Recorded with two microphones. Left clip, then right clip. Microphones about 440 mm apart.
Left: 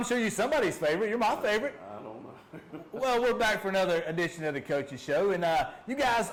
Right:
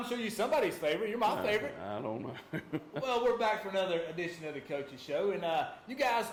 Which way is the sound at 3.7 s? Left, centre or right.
Left.